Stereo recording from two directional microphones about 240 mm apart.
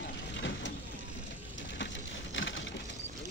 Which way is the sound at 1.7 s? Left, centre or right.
Left.